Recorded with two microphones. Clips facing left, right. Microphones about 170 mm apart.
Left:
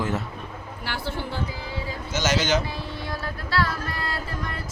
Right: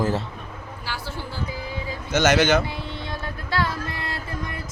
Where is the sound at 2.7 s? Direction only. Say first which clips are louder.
Even; 25° right (ahead or behind).